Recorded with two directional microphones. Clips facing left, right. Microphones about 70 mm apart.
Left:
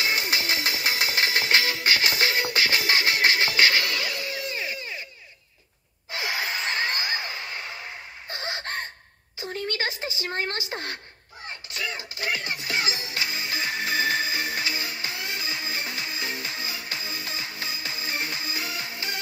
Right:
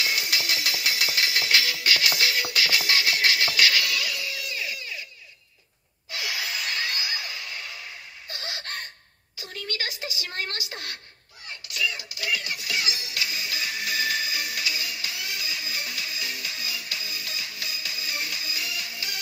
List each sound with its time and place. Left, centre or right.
0.0 s music: left
6.1 s a sound: left
11.4 s music: left